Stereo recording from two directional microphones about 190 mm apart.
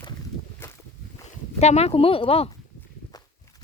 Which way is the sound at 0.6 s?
10° left (ahead or behind).